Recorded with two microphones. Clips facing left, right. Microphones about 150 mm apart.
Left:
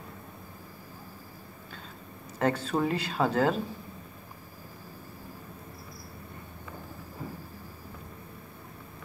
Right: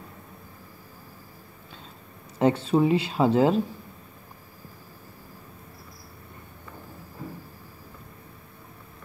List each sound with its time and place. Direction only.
2.3 s speech: 25° right (ahead or behind)